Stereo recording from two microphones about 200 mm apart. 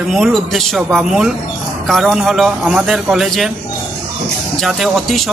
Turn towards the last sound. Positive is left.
turn(degrees=0)  # may be behind; listen again after turning